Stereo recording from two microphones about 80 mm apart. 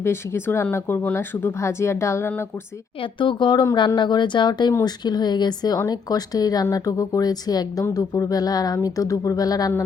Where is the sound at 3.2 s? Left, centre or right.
Left.